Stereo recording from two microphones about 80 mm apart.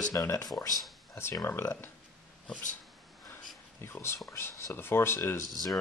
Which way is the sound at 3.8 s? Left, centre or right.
Left.